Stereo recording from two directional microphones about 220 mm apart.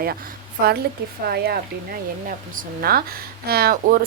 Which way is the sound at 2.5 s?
45° right (ahead or behind).